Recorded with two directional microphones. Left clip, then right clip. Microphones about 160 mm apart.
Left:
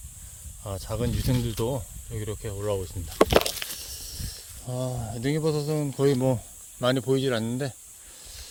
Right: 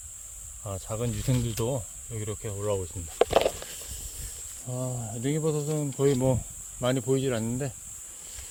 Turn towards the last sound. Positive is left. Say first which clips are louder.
# left 3 dB
turn(degrees=20)  # may be behind; listen again after turning